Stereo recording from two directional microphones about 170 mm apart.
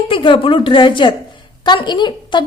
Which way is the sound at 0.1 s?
30° left (ahead or behind).